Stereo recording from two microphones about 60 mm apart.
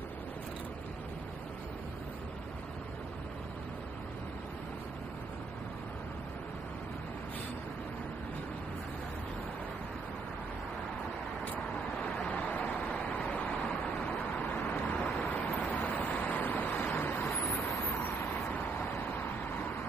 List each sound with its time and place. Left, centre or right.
12.2 s vehicle: left
15.2 s vehicle: left